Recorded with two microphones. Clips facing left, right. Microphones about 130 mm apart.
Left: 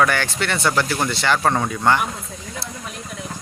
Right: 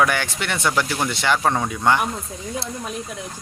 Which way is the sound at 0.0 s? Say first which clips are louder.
Left 1 dB; 15° right (ahead or behind).